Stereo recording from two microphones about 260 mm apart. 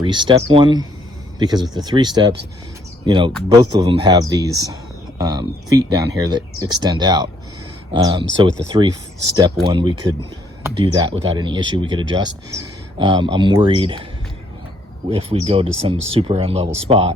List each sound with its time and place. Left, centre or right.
0.0 s speech: centre
15.1 s speech: right